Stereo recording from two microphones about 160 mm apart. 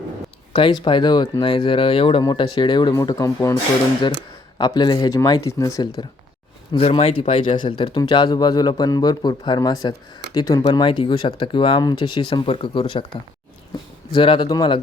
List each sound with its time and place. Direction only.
0.5 s speech: 30° left (ahead or behind)
6.7 s speech: 40° left (ahead or behind)
14.1 s speech: 30° left (ahead or behind)